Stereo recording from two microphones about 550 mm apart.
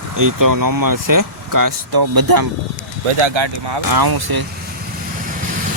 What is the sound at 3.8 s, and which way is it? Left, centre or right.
Speech, right.